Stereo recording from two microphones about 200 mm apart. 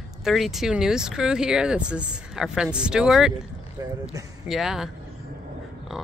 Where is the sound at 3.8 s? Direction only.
20° right (ahead or behind).